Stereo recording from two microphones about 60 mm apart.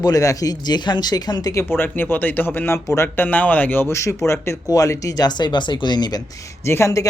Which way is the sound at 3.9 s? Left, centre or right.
Left.